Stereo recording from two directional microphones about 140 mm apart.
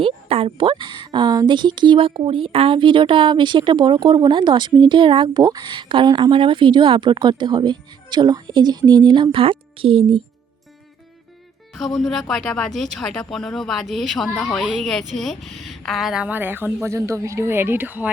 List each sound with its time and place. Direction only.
0.0 s speech: 45° right (ahead or behind)
11.9 s speech: centre (ahead or behind); by 18.1 s 15° right (ahead or behind)